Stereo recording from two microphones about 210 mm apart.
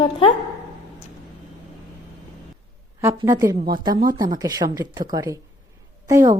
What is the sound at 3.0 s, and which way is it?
A woman's voice, 15° right (ahead or behind).